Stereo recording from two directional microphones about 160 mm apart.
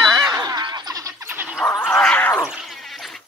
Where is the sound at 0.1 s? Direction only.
25° right (ahead or behind).